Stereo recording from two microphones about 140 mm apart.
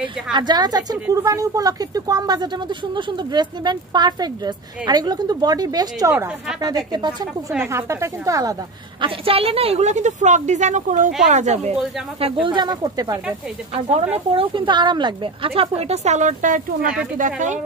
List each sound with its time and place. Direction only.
0.3 s speech: 30° right (ahead or behind)
9.0 s a woman's voice: 40° right (ahead or behind); by 13.2 s 25° right (ahead or behind)
14.3 s a woman's voice: 40° right (ahead or behind); by 17.6 s 60° right (ahead or behind)